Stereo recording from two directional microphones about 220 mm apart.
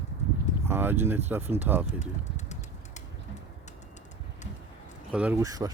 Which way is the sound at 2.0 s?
30° left (ahead or behind).